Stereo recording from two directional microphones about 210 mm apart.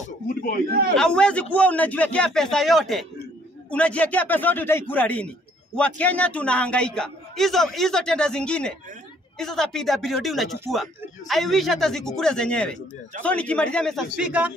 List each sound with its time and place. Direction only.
0.0 s a man's voice: 45° left (ahead or behind)
0.7 s a man's voice: 45° right (ahead or behind)
0.9 s a man's voice: 5° left (ahead or behind)